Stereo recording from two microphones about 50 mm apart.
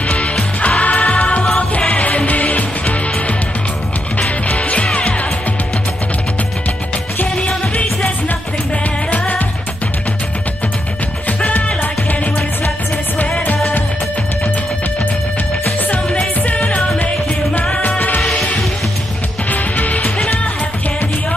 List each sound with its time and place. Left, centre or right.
0.6 s music: left
7.3 s music: left
9.1 s music: left
11.2 s music: left
16.4 s music: left
17.8 s music: left
18.2 s music: left
19.5 s music: left